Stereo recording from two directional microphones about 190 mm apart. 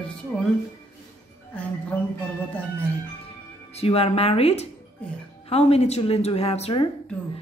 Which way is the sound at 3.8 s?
30° left (ahead or behind).